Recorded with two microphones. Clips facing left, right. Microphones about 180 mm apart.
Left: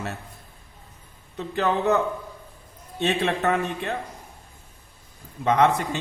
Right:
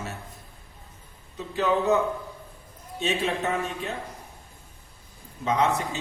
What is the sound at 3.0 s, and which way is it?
Speech, 60° left (ahead or behind).